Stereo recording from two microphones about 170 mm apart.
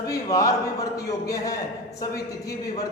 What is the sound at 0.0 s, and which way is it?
A man's voice, 20° left (ahead or behind).